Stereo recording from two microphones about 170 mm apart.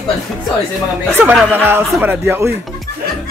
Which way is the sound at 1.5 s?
15° right (ahead or behind).